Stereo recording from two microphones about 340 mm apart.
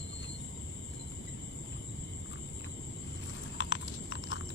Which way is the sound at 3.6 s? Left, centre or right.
Left.